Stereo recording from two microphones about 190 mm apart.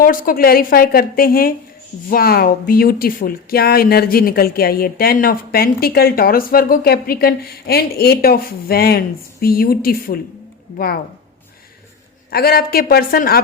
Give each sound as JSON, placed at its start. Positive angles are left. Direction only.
{"t": 0.0, "sound": "speech", "side_deg": 45}
{"t": 12.3, "sound": "speech", "side_deg": 50}